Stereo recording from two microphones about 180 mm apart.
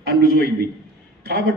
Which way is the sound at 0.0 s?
55° right (ahead or behind).